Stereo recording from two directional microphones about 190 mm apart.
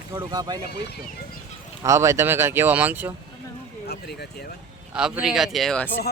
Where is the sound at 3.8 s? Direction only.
60° left (ahead or behind).